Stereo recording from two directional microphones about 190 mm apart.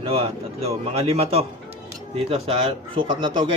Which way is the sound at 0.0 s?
30° right (ahead or behind).